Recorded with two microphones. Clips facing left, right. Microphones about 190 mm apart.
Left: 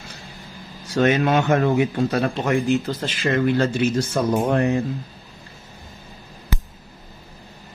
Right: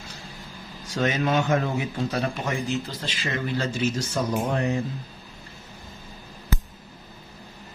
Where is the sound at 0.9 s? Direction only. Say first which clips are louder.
Left 6 dB; 65° left (ahead or behind).